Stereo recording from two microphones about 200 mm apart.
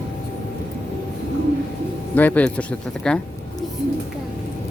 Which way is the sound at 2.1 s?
10° left (ahead or behind).